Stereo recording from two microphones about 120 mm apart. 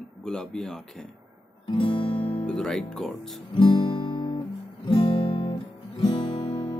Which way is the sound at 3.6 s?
45° left (ahead or behind).